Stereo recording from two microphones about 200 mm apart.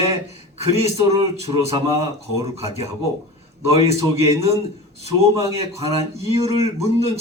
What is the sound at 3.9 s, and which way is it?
Speech, 30° right (ahead or behind).